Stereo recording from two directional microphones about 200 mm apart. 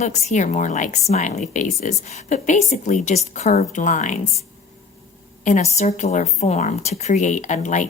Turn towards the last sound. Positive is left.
turn(degrees=40)  # may be behind; listen again after turning